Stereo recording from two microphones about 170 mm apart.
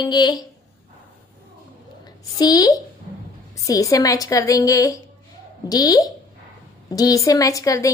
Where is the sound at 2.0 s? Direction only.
20° left (ahead or behind).